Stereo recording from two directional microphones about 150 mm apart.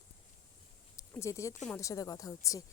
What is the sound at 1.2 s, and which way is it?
Speech, 20° left (ahead or behind).